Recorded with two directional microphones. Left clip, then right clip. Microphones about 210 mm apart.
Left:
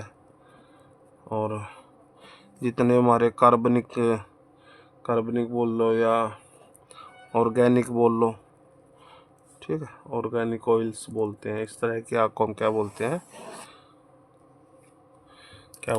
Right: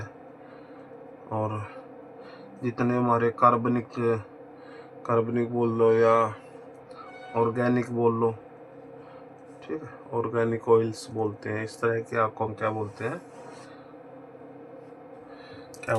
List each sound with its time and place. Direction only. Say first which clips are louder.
1.3 s speech: left 2 dB; 35° left (ahead or behind)
2.6 s speech: left 6 dB; 50° left (ahead or behind)
5.0 s speech: even; 35° left (ahead or behind)
7.3 s speech: left 4 dB; 50° left (ahead or behind)
9.6 s speech: left 4 dB; 45° left (ahead or behind)